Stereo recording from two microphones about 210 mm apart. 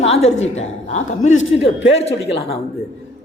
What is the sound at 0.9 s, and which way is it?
Speech, 35° left (ahead or behind).